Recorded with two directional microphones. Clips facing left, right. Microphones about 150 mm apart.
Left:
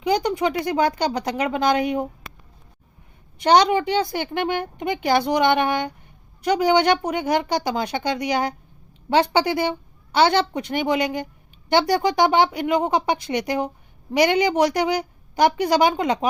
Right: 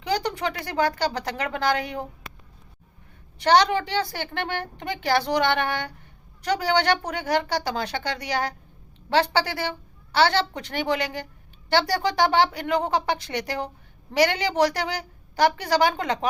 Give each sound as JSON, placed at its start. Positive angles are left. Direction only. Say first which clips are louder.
{"t": 0.0, "sound": "a woman's voice", "louder": "left 5 dB", "side_deg": 15}
{"t": 3.3, "sound": "a woman's voice", "louder": "left 3 dB", "side_deg": 15}